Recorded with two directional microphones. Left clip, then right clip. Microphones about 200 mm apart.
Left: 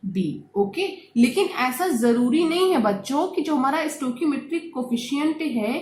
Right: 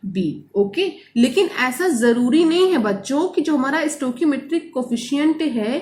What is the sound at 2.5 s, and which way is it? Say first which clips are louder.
A woman's voice: right 3 dB; 25° left (ahead or behind).